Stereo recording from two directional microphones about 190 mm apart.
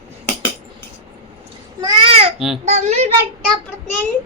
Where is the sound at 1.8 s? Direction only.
30° right (ahead or behind).